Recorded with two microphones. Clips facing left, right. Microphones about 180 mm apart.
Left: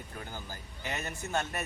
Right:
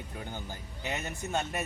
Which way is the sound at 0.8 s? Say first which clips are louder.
Right 2 dB; 20° right (ahead or behind).